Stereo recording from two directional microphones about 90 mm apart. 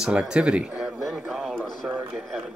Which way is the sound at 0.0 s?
5° right (ahead or behind).